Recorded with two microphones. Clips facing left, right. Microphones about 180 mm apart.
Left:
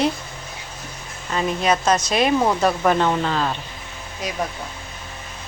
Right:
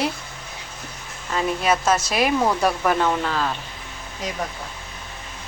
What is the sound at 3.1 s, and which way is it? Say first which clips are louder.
Speech: left 2 dB; 15° left (ahead or behind).